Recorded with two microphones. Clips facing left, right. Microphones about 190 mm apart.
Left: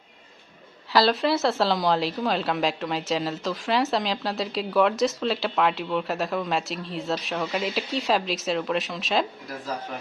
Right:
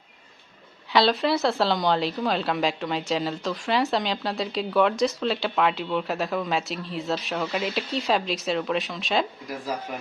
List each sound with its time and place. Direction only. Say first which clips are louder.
0.9 s a woman's voice: even; centre (ahead or behind)